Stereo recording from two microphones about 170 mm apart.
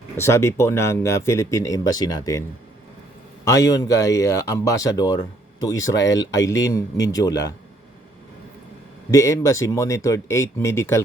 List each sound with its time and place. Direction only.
0.2 s speech: 15° left (ahead or behind)
3.4 s speech: 20° left (ahead or behind)
9.0 s speech: 20° left (ahead or behind)